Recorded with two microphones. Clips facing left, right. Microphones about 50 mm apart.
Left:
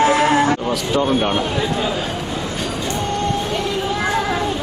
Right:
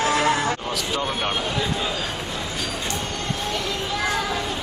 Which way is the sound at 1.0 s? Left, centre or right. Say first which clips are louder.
Left 9 dB; centre.